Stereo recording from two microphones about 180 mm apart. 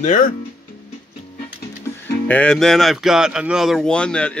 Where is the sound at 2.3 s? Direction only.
5° left (ahead or behind).